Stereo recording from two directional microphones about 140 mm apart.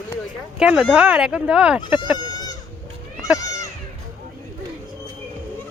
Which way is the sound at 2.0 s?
30° left (ahead or behind).